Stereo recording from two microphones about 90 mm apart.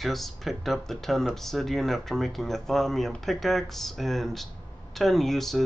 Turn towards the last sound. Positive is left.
turn(degrees=5)  # may be behind; listen again after turning